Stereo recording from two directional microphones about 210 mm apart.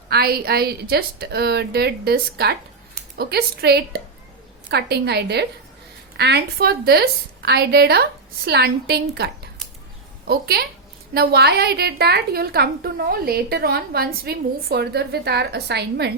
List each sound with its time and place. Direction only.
0.1 s a woman's voice: 45° right (ahead or behind)